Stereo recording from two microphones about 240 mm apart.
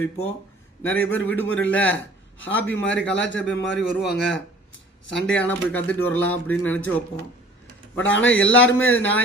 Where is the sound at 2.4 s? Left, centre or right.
Left.